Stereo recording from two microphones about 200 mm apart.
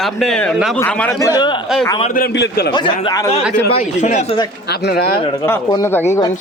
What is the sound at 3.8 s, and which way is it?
Speech, 35° left (ahead or behind).